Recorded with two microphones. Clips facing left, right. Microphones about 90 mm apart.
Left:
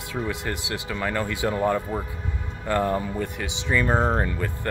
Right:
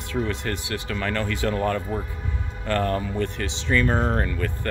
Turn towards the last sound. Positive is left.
turn(degrees=20)  # may be behind; listen again after turning